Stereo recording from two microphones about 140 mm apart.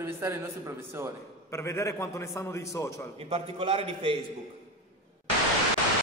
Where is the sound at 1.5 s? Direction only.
20° left (ahead or behind).